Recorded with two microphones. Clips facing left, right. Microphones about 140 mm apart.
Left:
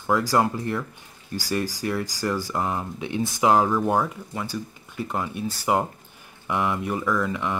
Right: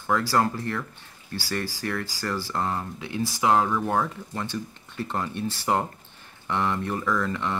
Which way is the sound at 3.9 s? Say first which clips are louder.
Left 2 dB; 10° left (ahead or behind).